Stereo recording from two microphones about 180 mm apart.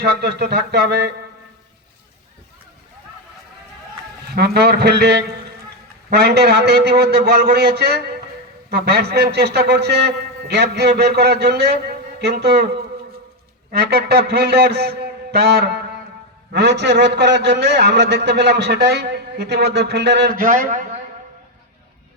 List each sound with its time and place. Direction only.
0.0 s a man's voice: 65° right (ahead or behind)
4.4 s a man's voice: 65° right (ahead or behind)
20.4 s a man's voice: 45° right (ahead or behind)